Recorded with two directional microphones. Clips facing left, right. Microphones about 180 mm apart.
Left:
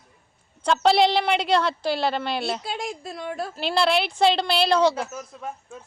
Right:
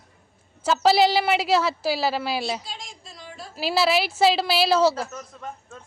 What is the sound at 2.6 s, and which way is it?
Speech, 60° left (ahead or behind).